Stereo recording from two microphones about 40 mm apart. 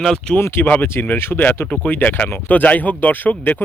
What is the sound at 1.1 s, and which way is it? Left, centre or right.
Speech, left.